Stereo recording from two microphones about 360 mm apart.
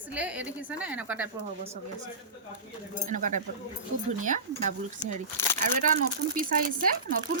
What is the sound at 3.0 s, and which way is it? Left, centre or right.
Speech, right.